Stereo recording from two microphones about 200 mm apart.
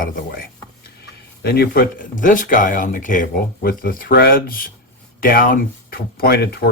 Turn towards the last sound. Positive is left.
turn(degrees=50)  # may be behind; listen again after turning